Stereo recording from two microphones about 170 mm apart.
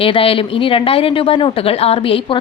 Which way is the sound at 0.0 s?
35° left (ahead or behind).